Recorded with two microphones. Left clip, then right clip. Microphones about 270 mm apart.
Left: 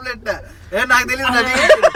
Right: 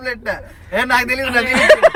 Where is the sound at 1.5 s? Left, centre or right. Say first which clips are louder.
Right 2 dB; right.